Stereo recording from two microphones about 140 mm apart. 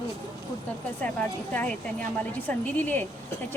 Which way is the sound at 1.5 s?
10° left (ahead or behind).